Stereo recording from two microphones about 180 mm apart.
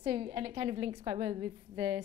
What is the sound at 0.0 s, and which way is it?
A woman's voice, 30° right (ahead or behind).